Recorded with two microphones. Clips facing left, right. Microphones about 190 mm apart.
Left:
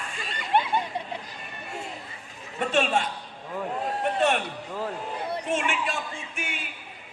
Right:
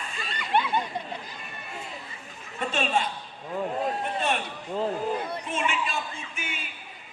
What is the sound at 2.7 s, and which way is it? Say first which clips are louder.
A man's voice: left 3 dB; 70° left (ahead or behind).